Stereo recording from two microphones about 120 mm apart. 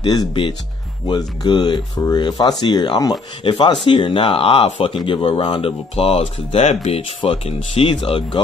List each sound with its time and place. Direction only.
0.0 s speech: 35° left (ahead or behind); by 4.9 s 55° left (ahead or behind)
4.9 s speech: 45° left (ahead or behind); by 7.0 s 65° left (ahead or behind)
7.2 s speech: 50° left (ahead or behind)